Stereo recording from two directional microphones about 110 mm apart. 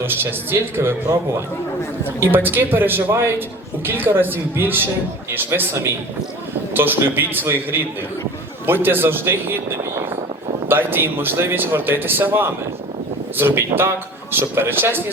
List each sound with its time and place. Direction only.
0.0 s speech: 20° right (ahead or behind)